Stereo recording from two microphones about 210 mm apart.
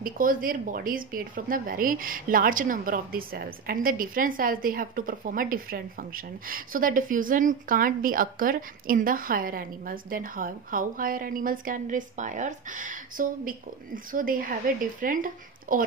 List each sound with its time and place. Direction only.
0.0 s speech: 40° right (ahead or behind)